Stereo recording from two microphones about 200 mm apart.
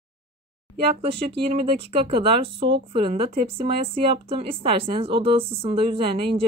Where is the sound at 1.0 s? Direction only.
30° right (ahead or behind).